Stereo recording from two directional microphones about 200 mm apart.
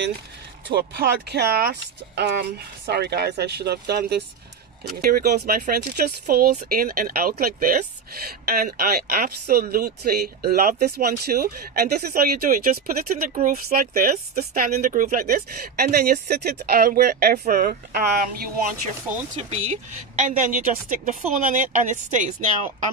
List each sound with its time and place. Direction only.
0.7 s speech: 55° right (ahead or behind)
19.1 s speech: 10° right (ahead or behind)
19.5 s a woman's voice: 35° right (ahead or behind)